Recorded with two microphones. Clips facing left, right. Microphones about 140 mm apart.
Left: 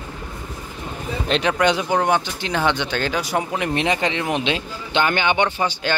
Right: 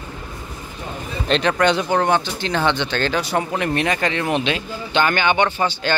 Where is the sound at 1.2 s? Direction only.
5° left (ahead or behind).